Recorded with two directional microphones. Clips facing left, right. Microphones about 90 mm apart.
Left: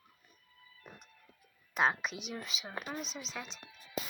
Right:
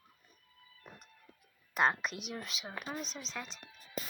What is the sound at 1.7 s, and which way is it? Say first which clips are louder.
A woman's voice: even; centre (ahead or behind).